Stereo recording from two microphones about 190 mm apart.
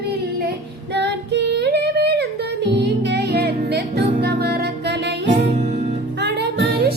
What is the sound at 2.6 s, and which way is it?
Music, 60° right (ahead or behind).